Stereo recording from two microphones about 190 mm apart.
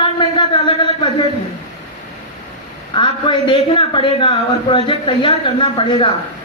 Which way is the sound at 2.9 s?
25° left (ahead or behind).